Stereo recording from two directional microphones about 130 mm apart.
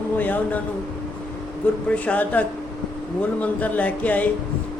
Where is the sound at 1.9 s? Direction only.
10° left (ahead or behind).